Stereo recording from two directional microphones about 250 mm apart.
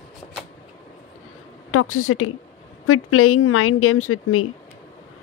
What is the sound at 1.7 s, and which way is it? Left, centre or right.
Speech, left.